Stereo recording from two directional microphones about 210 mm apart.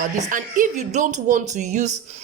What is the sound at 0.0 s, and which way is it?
A woman's voice, 40° right (ahead or behind).